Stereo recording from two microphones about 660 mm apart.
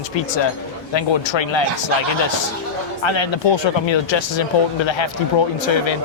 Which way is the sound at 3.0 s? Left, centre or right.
Left.